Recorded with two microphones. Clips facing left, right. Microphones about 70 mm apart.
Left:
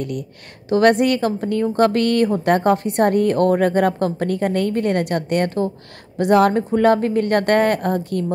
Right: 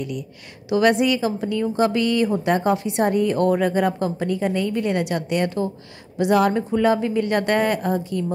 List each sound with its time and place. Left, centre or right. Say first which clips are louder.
0.7 s a woman's voice: left 3 dB; left